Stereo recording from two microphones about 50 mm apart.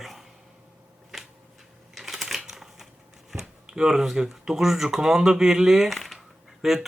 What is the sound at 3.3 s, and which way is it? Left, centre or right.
Speech, centre.